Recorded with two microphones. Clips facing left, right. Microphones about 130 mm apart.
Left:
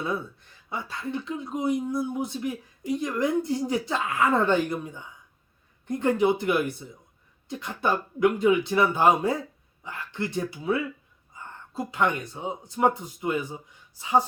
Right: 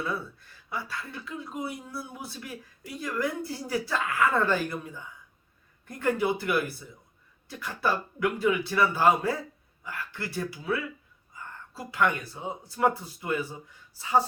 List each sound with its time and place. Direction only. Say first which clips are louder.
0.7 s speech: left 4 dB; 25° left (ahead or behind)
11.3 s a sound: left 1 dB; 25° left (ahead or behind)
11.7 s speech: left 1 dB; 20° left (ahead or behind)